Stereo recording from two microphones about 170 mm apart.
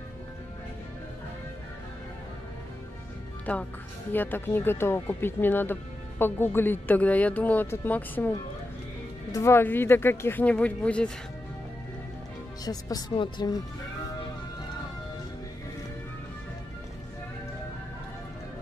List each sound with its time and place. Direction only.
3.5 s speech: 5° left (ahead or behind)
9.3 s speech: 15° left (ahead or behind)
12.6 s speech: 20° left (ahead or behind)